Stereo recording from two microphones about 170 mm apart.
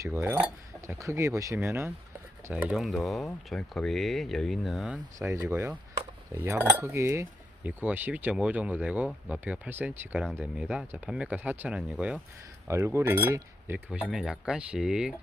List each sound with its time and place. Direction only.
0.0 s cutlery: 15° right (ahead or behind)
2.5 s speech: 5° right (ahead or behind)
6.3 s cutlery: 15° right (ahead or behind)